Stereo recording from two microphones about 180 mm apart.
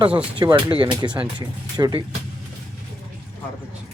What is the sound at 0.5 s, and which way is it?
Speech, 30° right (ahead or behind).